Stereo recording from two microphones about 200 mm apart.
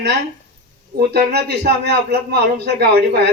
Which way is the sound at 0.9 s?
55° right (ahead or behind).